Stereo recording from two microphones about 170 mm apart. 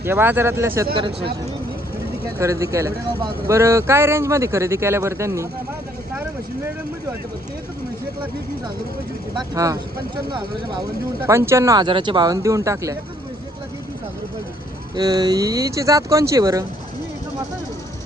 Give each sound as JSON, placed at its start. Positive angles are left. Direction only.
{"t": 0.0, "sound": "speech", "side_deg": -15}
{"t": 2.4, "sound": "speech", "side_deg": -15}
{"t": 9.3, "sound": "speech", "side_deg": -20}
{"t": 11.3, "sound": "speech", "side_deg": -15}
{"t": 14.9, "sound": "speech", "side_deg": -25}